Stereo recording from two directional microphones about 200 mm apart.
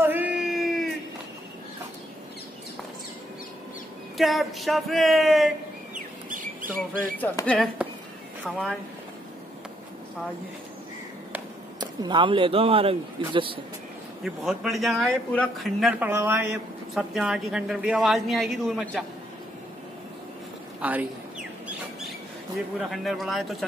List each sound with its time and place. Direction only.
0.0 s a sound: 10° right (ahead or behind)
4.2 s speech: centre (ahead or behind)
5.9 s a sound: 40° right (ahead or behind)
7.2 s speech: 5° left (ahead or behind)
11.8 s a man's voice: 20° right (ahead or behind)
14.2 s speech: centre (ahead or behind)
16.9 s speech: centre (ahead or behind)
20.8 s rodents: 5° right (ahead or behind)
22.8 s speech: centre (ahead or behind)